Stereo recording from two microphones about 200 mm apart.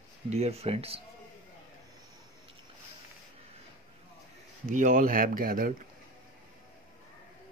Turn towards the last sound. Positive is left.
turn(degrees=-45)  # may be behind; listen again after turning